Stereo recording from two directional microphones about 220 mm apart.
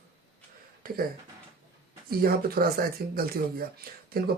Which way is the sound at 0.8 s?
40° right (ahead or behind).